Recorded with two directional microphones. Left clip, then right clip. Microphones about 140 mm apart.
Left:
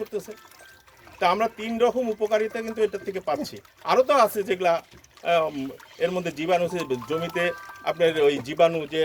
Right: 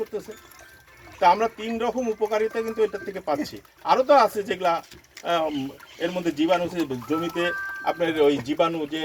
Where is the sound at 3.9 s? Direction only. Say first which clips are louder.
Right 2 dB; 40° left (ahead or behind).